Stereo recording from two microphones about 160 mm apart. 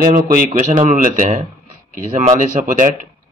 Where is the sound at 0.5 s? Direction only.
55° right (ahead or behind).